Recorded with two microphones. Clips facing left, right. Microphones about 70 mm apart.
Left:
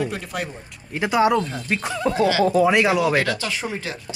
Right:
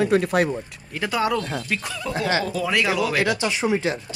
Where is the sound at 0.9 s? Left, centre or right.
Left.